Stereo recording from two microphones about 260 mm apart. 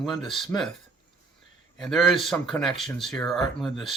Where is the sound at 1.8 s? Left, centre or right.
Centre.